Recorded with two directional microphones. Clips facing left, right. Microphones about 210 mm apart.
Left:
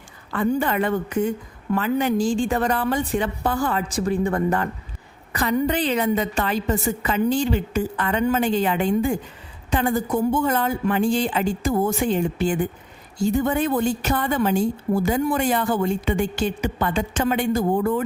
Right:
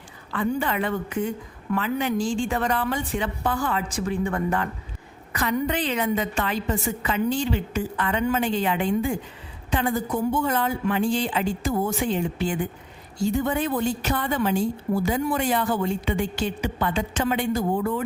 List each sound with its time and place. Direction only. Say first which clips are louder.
0.3 s a woman's voice: left 4 dB; 45° left (ahead or behind)